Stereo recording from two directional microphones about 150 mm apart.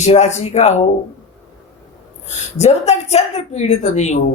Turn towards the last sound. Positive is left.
turn(degrees=50)  # may be behind; listen again after turning